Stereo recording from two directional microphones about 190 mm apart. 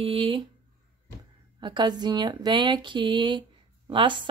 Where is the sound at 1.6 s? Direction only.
25° right (ahead or behind).